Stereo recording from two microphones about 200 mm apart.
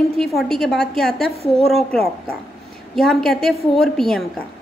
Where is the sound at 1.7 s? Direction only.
Centre (ahead or behind).